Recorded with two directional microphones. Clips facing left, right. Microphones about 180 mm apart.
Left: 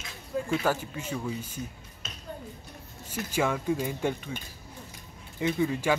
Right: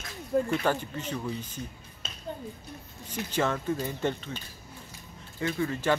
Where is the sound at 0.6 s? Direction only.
10° left (ahead or behind).